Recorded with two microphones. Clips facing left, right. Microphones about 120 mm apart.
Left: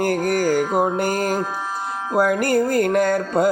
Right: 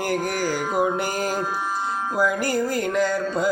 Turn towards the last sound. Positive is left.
turn(degrees=55)  # may be behind; listen again after turning